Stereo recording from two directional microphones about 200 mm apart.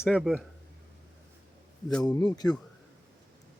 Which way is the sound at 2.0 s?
20° left (ahead or behind).